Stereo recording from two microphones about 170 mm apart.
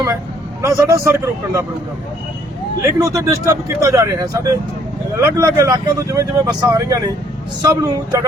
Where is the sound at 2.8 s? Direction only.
20° right (ahead or behind).